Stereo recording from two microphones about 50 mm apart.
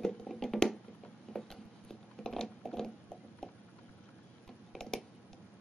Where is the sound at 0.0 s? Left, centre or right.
Centre.